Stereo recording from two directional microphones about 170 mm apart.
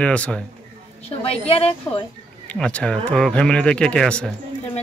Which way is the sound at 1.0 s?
35° left (ahead or behind).